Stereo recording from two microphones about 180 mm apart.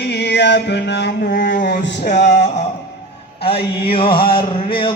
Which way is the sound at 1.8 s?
75° left (ahead or behind).